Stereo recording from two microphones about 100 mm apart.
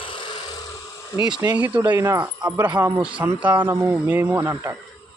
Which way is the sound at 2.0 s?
30° right (ahead or behind).